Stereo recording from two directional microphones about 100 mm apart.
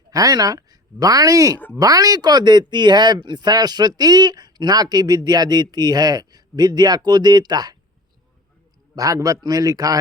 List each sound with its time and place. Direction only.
0.1 s speech: 40° right (ahead or behind)
9.0 s a man's voice: 35° right (ahead or behind)